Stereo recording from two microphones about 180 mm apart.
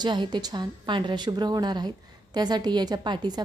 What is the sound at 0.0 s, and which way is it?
A woman's voice, 25° right (ahead or behind).